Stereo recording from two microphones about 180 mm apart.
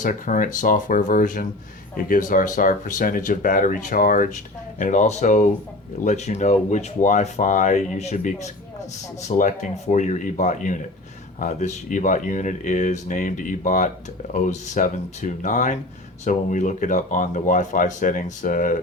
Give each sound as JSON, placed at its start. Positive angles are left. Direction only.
{"t": 0.0, "sound": "speech", "side_deg": 45}